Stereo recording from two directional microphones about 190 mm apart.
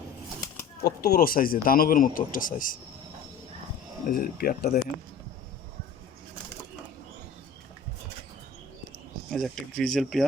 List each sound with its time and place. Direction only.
0.8 s speech: 55° left (ahead or behind)
4.1 s speech: 55° left (ahead or behind)
9.3 s speech: centre (ahead or behind)